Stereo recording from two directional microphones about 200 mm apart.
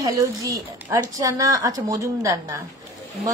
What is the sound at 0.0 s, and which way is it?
A woman's voice, 15° right (ahead or behind).